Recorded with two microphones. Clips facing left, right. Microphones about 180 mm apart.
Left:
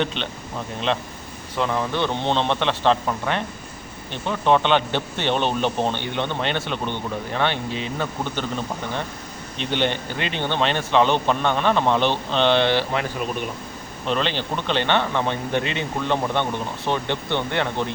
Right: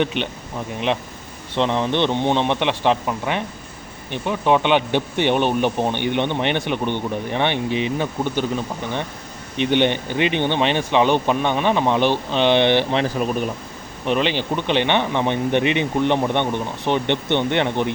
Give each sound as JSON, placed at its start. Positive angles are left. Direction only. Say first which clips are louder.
{"t": 0.0, "sound": "speech", "louder": "right 4 dB", "side_deg": -15}
{"t": 1.5, "sound": "speech", "louder": "right 4 dB", "side_deg": -25}
{"t": 9.6, "sound": "speech", "louder": "right 5 dB", "side_deg": -15}